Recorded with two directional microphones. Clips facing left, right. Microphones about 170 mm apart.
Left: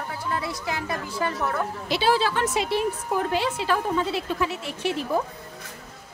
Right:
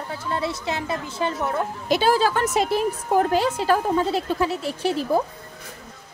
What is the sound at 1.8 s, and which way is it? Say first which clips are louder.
A woman's voice: right 3 dB; 45° right (ahead or behind).